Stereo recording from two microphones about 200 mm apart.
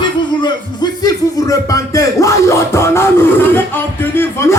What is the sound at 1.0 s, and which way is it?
Music, 15° left (ahead or behind).